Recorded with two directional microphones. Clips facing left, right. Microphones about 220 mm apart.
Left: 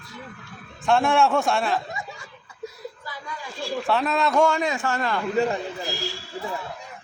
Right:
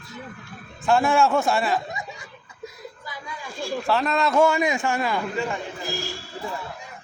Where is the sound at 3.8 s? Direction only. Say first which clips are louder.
Even; centre (ahead or behind).